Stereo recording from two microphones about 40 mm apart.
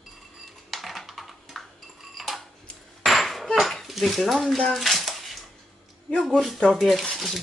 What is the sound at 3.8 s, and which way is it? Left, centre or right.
Speech, centre.